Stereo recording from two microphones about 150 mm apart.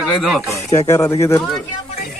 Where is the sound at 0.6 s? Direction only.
20° left (ahead or behind).